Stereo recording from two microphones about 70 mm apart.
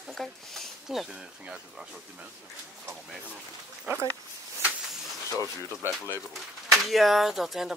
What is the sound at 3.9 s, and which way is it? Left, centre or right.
Speech, right.